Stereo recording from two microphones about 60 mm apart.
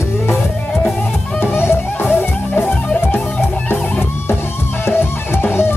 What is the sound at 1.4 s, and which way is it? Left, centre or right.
Music, left.